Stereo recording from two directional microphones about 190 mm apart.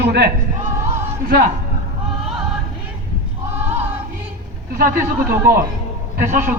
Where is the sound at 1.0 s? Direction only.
45° right (ahead or behind).